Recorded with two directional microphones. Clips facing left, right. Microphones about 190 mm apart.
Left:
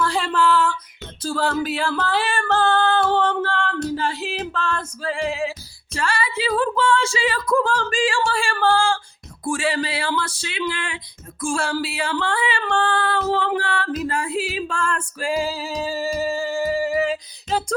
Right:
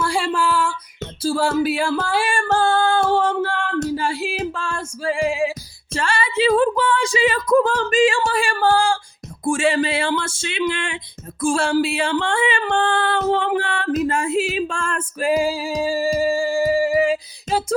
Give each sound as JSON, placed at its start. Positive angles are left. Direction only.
{"t": 0.0, "sound": "music", "side_deg": -10}
{"t": 1.2, "sound": "female singing", "side_deg": -10}
{"t": 3.1, "sound": "singing", "side_deg": -10}
{"t": 3.9, "sound": "music", "side_deg": -10}
{"t": 5.9, "sound": "a sound", "side_deg": -30}
{"t": 16.1, "sound": "music", "side_deg": -10}